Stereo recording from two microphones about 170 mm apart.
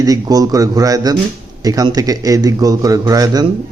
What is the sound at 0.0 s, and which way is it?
Speech, 20° right (ahead or behind).